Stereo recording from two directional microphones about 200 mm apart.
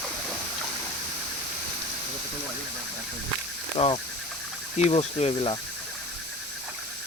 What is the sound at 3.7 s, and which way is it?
Speech, 25° left (ahead or behind).